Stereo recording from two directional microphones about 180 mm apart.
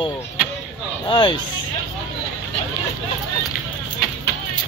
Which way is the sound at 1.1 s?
25° left (ahead or behind).